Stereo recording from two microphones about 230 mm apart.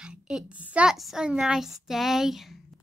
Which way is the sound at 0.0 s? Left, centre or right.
Centre.